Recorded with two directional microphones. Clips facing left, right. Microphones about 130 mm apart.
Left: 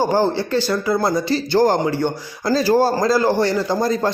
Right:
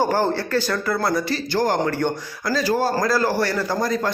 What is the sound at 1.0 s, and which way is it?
Speech, 25° left (ahead or behind).